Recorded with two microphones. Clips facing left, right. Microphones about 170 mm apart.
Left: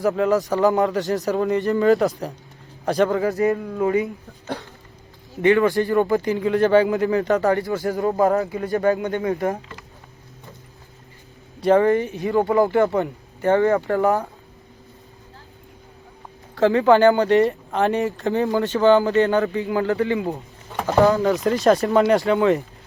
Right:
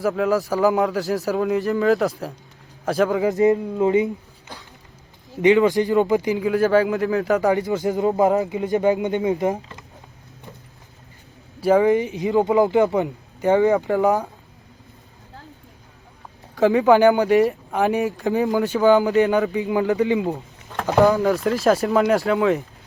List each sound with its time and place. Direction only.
0.0 s speech: centre (ahead or behind)
3.2 s speech: 20° right (ahead or behind)
5.4 s speech: 15° right (ahead or behind)
11.6 s speech: 5° right (ahead or behind)
16.6 s speech: 15° right (ahead or behind)
20.3 s a sound: centre (ahead or behind)
20.9 s speech: 5° right (ahead or behind)